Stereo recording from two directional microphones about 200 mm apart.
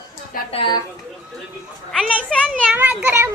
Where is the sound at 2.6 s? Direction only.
10° right (ahead or behind).